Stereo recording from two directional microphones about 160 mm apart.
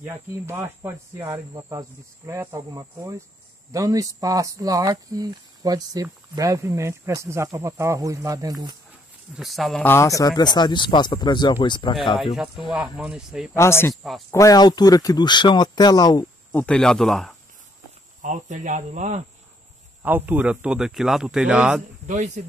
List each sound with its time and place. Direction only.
0.0 s speech: 15° right (ahead or behind)
9.4 s speech: centre (ahead or behind)
9.8 s speech: 20° left (ahead or behind)
12.7 s speech: 5° right (ahead or behind)
13.6 s speech: 15° left (ahead or behind)
16.5 s speech: 5° left (ahead or behind)
18.2 s speech: 50° right (ahead or behind)
20.0 s speech: 10° right (ahead or behind)
22.0 s a man's voice: 50° right (ahead or behind)